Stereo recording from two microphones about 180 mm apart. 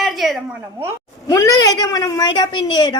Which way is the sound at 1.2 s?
20° left (ahead or behind).